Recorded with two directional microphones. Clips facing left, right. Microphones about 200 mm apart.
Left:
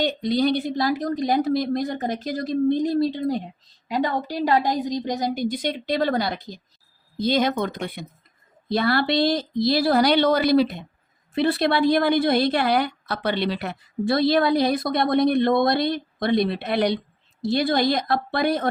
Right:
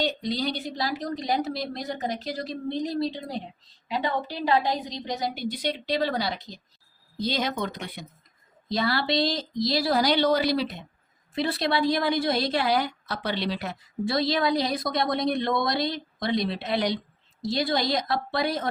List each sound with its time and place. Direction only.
0.0 s a woman's voice: 55° left (ahead or behind)